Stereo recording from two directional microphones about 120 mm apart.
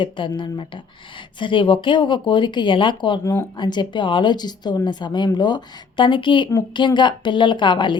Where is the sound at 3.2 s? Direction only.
20° left (ahead or behind).